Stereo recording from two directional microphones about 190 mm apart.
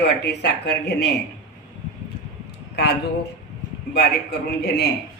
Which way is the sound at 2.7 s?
60° left (ahead or behind).